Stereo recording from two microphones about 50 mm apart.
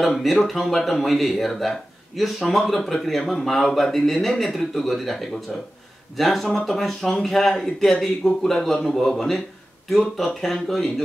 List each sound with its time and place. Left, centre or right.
0.0 s a man's voice: centre